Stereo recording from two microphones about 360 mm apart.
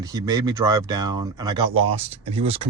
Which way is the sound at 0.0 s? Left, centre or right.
Centre.